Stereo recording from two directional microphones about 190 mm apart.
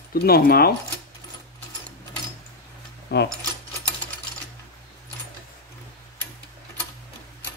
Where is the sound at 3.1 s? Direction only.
60° left (ahead or behind).